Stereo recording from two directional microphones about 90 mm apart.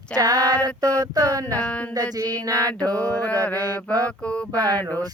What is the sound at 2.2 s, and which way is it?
Mantra, 40° right (ahead or behind).